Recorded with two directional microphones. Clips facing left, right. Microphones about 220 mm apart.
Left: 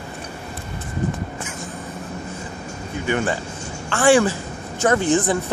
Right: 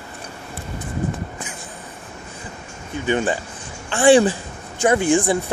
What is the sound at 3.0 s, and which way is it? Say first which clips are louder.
Speech: right 2 dB; 20° right (ahead or behind).